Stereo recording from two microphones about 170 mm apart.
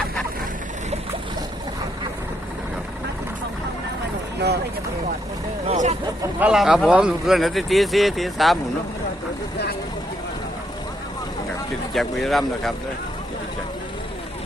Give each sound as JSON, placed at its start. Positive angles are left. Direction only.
{"t": 5.6, "sound": "speech", "side_deg": -40}
{"t": 6.4, "sound": "speech", "side_deg": -5}
{"t": 11.9, "sound": "speech", "side_deg": 0}